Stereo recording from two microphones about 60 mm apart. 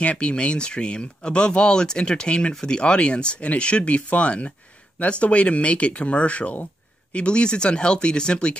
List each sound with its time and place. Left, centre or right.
0.0 s speech: centre